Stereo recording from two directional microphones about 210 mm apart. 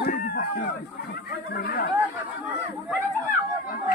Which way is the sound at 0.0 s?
45° left (ahead or behind).